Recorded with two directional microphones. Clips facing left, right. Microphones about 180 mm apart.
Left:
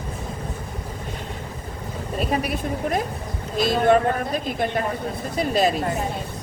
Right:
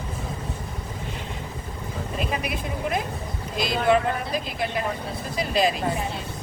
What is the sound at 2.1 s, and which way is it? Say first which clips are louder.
A woman's voice: left 5 dB; 40° left (ahead or behind).